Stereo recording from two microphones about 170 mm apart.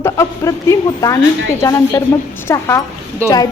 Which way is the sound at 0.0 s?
15° left (ahead or behind).